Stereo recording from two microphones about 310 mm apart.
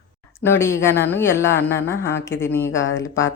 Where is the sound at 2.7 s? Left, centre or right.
Left.